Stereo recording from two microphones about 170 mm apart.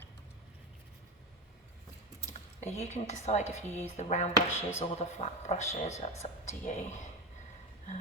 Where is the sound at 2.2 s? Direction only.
40° left (ahead or behind).